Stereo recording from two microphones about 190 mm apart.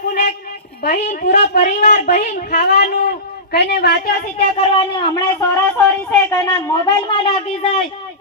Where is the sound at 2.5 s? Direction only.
60° left (ahead or behind).